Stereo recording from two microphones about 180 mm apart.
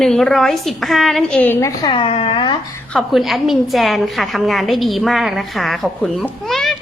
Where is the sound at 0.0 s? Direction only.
Centre (ahead or behind).